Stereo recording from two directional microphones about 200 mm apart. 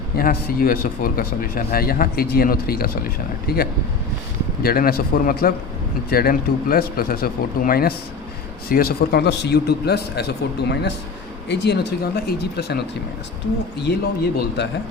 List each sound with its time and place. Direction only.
0.2 s a man's voice: 45° left (ahead or behind)
13.9 s a man's voice: 50° left (ahead or behind)